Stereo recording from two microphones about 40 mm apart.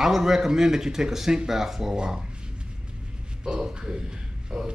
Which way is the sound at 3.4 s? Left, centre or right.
Centre.